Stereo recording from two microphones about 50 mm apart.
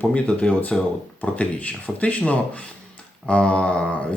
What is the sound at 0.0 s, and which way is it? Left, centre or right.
Speech, left.